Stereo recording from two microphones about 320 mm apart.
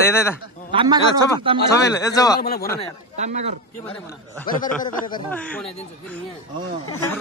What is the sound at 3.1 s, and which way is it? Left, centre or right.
Speech, right.